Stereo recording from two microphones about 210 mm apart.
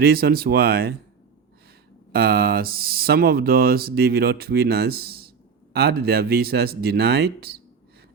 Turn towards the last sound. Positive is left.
turn(degrees=-50)  # may be behind; listen again after turning